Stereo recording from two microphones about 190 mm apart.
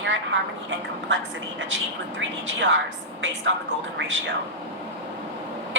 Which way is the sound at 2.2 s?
75° right (ahead or behind).